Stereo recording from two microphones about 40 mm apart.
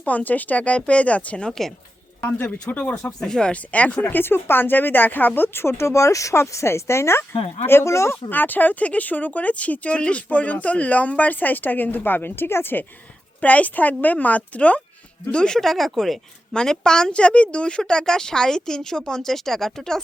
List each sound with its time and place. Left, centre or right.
0.0 s speech: left
1.5 s speech: centre
2.9 s speech: centre
3.5 s speech: left
4.1 s speech: left
6.7 s speech: left
8.3 s speech: left
13.4 s speech: left
15.3 s speech: centre
15.6 s speech: centre
16.6 s speech: centre